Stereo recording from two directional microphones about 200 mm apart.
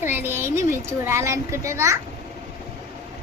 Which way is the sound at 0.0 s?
10° right (ahead or behind).